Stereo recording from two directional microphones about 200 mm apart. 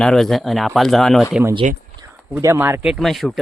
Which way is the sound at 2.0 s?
15° right (ahead or behind).